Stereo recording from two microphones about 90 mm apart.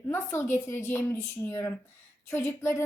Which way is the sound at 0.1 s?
25° left (ahead or behind).